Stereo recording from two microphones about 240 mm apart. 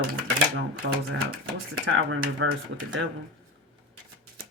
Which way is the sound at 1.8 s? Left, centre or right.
Right.